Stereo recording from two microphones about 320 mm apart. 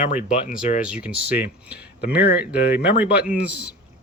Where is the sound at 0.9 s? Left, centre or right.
Centre.